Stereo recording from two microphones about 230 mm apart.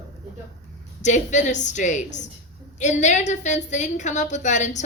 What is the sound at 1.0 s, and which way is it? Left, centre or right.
Speech, left.